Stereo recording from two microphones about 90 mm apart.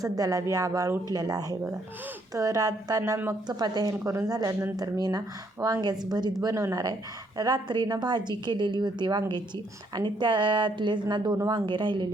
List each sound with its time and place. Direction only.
0.0 s speech: 40° right (ahead or behind)
6.1 s speech: 50° right (ahead or behind)
6.4 s a woman's voice: 35° right (ahead or behind); by 12.0 s 65° right (ahead or behind)